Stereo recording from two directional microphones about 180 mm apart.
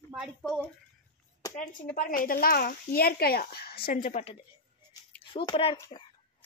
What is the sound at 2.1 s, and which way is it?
Speech, 50° left (ahead or behind).